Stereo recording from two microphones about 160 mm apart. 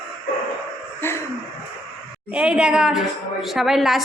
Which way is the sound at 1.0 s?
15° left (ahead or behind).